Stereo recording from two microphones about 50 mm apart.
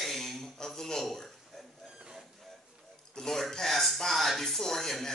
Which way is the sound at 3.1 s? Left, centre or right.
Centre.